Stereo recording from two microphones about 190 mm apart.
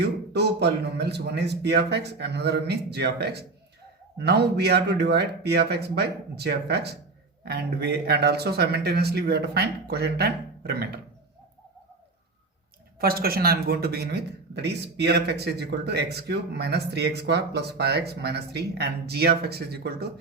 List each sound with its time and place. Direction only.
0.0 s a man's voice: 60° right (ahead or behind)
13.0 s a man's voice: 50° right (ahead or behind)